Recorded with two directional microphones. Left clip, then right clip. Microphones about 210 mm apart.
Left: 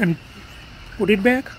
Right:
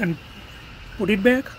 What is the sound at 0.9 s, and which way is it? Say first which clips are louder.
Speech: left 2 dB; centre (ahead or behind).